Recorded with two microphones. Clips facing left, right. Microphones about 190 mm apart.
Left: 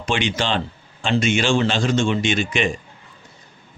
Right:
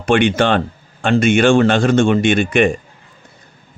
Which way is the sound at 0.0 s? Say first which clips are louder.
Right 9 dB; 55° right (ahead or behind).